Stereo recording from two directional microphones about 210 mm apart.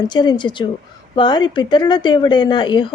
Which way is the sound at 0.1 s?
20° left (ahead or behind).